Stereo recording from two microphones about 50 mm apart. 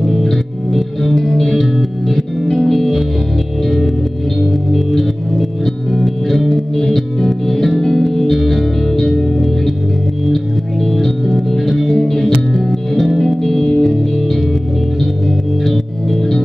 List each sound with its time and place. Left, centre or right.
0.0 s music: centre
5.9 s music: centre
10.9 s music: centre